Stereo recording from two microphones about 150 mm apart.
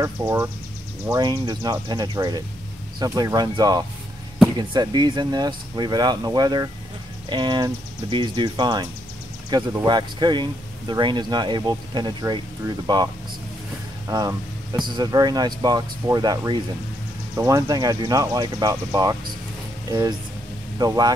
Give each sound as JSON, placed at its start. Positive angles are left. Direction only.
{"t": 0.0, "sound": "speech", "side_deg": -20}
{"t": 1.1, "sound": "speech", "side_deg": -30}